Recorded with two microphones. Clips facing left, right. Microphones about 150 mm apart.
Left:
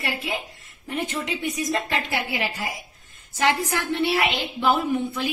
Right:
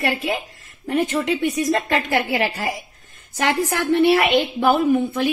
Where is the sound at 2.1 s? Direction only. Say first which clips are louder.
Right 7 dB; 80° right.